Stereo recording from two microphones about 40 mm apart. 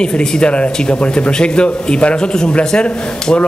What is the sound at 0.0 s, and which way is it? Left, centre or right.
A man's voice, left.